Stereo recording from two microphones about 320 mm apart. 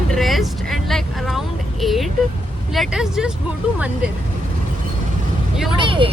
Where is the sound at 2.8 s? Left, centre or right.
Centre.